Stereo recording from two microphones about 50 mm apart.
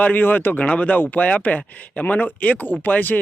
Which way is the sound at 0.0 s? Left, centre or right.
Left.